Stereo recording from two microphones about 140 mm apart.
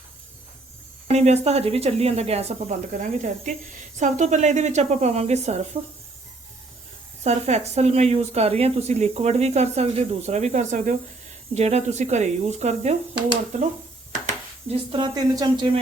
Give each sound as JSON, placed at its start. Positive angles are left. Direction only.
{"t": 1.1, "sound": "speech", "side_deg": -50}
{"t": 7.3, "sound": "speech", "side_deg": -50}
{"t": 14.7, "sound": "speech", "side_deg": -35}